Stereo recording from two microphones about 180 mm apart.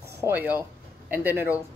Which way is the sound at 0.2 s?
10° right (ahead or behind).